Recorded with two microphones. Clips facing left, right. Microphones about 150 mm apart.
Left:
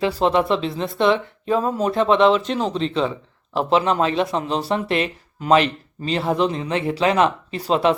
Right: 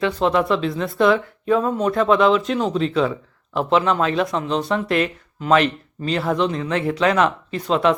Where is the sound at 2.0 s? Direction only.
Centre (ahead or behind).